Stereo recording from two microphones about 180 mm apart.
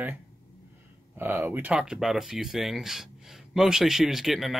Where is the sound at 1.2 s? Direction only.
10° right (ahead or behind).